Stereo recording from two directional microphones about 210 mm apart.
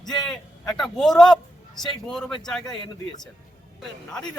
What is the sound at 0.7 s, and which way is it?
Speech, centre (ahead or behind).